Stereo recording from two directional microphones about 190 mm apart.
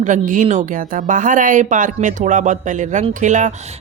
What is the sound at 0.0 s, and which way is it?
Speech, 40° right (ahead or behind).